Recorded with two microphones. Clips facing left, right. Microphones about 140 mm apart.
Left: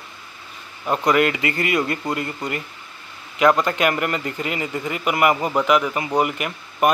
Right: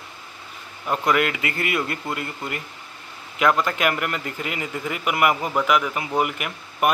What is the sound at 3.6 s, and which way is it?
Speech, centre (ahead or behind).